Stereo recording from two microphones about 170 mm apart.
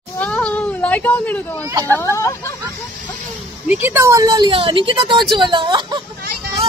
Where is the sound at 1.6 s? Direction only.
20° right (ahead or behind).